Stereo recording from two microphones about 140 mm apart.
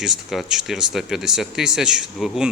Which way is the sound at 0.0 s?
Centre (ahead or behind).